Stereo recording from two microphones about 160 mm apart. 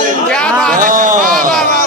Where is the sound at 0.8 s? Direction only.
55° right (ahead or behind).